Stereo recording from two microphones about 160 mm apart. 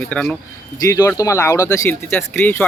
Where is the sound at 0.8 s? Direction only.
15° left (ahead or behind).